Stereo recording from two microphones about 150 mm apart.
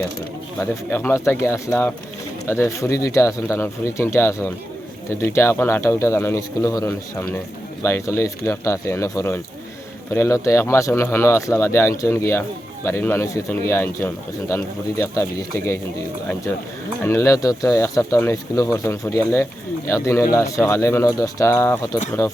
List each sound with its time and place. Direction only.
0.6 s speech: 15° left (ahead or behind)
17.0 s speech: 20° left (ahead or behind)